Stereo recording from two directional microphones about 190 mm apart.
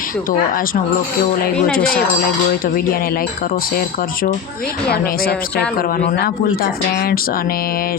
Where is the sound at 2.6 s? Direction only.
50° left (ahead or behind).